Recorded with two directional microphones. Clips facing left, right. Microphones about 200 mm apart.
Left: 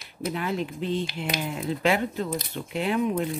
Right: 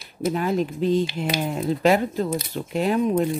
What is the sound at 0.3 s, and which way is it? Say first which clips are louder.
Speech: right 6 dB; 40° right (ahead or behind).